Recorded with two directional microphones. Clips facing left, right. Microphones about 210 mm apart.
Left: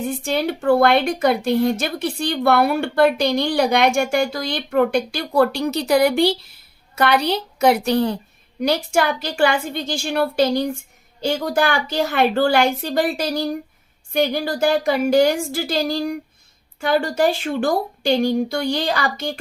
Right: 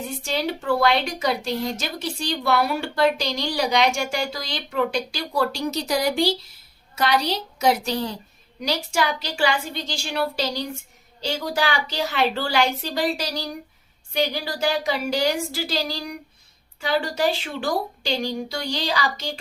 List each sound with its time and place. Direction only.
0.1 s a woman's voice: 55° left (ahead or behind)